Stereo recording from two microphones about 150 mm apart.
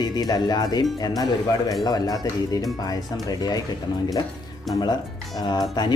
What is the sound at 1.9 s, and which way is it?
Speech, 25° left (ahead or behind).